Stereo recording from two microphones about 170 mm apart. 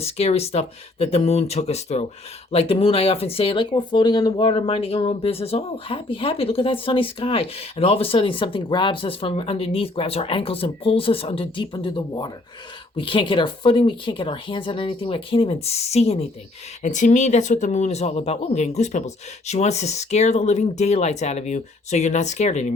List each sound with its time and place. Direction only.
0.0 s speech: 35° left (ahead or behind)